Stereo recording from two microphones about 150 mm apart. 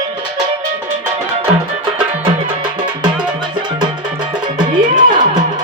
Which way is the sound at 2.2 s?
35° right (ahead or behind).